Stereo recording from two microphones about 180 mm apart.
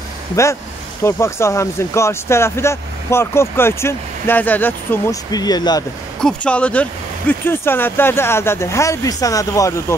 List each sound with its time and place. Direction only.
0.4 s speech: 15° left (ahead or behind)
6.2 s speech: 5° left (ahead or behind)